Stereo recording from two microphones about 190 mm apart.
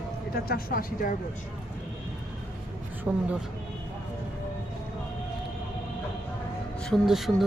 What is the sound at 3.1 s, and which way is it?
Speech, 10° right (ahead or behind).